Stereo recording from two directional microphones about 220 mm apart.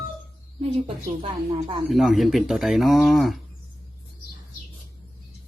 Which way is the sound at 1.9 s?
Centre (ahead or behind).